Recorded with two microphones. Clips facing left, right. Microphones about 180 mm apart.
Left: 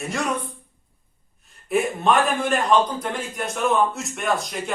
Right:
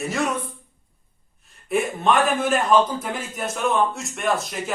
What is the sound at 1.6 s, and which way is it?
A man's voice, centre (ahead or behind).